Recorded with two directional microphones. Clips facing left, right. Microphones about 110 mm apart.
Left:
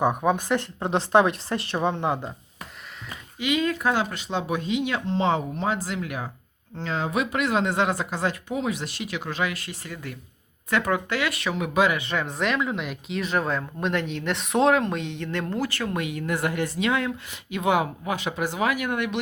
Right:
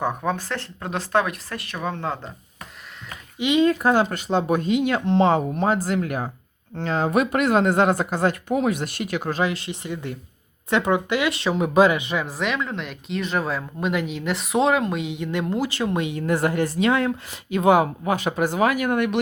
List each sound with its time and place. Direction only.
0.0 s a woman's voice: 15° left (ahead or behind)
3.3 s speech: 25° right (ahead or behind)
3.7 s speech: 40° right (ahead or behind)
9.4 s speech: 25° right (ahead or behind)
11.9 s speech: 15° right (ahead or behind)
12.2 s speech: centre (ahead or behind); by 19.2 s 50° right (ahead or behind)